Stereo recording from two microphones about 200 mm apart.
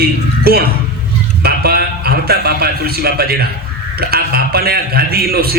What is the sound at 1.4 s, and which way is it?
A man's voice, 50° right (ahead or behind).